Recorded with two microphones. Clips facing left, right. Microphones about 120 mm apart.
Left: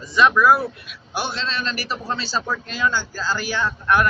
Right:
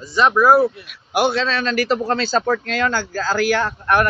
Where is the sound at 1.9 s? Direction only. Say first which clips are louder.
Right 7 dB; 90° right.